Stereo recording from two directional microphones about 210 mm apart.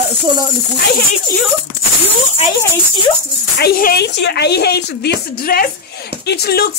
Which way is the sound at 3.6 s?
45° left (ahead or behind).